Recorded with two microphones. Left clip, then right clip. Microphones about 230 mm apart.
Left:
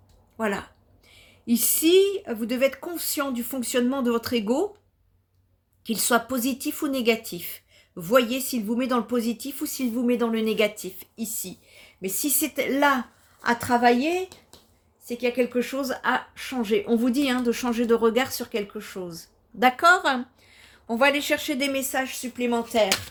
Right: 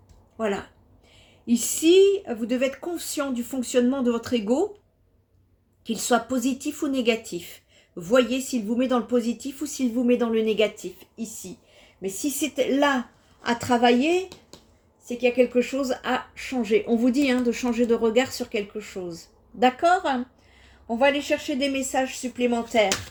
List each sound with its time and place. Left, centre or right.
0.3 s a woman's voice: left
5.8 s a woman's voice: left